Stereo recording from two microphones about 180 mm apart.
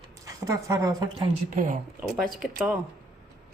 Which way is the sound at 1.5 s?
45° right (ahead or behind).